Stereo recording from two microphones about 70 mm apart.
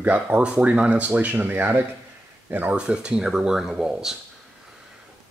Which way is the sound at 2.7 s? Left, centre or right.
Centre.